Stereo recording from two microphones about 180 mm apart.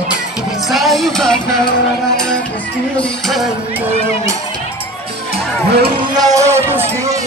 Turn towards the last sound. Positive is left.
turn(degrees=-15)  # may be behind; listen again after turning